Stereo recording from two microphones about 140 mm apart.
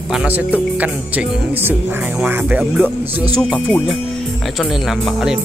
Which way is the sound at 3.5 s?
5° left (ahead or behind).